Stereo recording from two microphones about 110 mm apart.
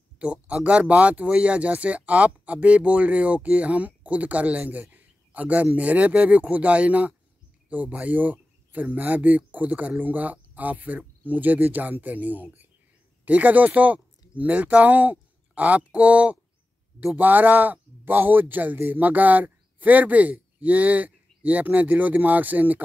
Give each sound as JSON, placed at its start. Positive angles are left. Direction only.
{"t": 0.2, "sound": "speech", "side_deg": -10}